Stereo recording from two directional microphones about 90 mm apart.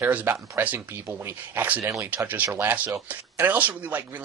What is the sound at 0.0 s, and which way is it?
Speech, 20° right (ahead or behind).